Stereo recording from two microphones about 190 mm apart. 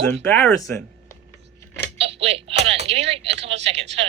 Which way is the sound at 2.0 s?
30° right (ahead or behind).